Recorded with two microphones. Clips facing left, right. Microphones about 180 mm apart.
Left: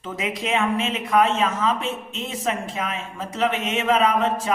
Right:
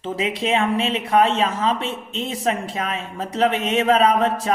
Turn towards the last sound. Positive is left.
turn(degrees=-35)  # may be behind; listen again after turning